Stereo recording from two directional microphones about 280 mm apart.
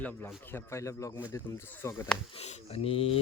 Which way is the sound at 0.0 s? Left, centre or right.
Centre.